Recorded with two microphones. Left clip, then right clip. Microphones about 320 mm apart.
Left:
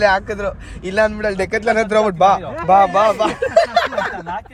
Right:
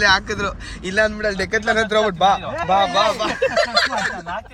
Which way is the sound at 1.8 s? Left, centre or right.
Left.